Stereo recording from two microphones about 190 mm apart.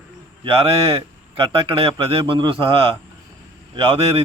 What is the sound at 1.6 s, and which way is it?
A man's voice, 30° right (ahead or behind).